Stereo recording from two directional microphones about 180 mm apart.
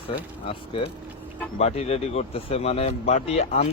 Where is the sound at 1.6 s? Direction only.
35° left (ahead or behind).